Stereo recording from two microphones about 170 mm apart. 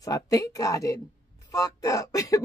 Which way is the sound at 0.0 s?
20° left (ahead or behind).